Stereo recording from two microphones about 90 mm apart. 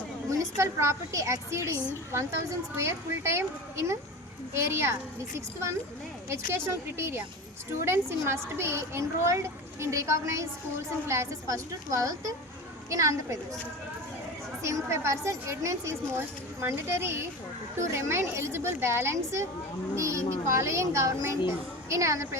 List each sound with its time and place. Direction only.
0.3 s a woman's voice: 35° right (ahead or behind)
6.2 s a woman's voice: 30° right (ahead or behind)
14.6 s a woman's voice: 30° right (ahead or behind)